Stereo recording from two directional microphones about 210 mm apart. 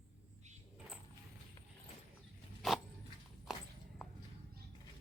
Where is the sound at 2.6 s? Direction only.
Centre (ahead or behind).